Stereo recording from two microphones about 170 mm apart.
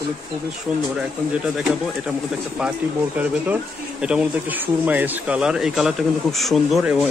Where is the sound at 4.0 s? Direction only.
5° right (ahead or behind).